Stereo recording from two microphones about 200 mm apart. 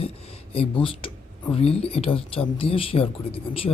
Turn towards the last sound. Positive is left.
turn(degrees=30)  # may be behind; listen again after turning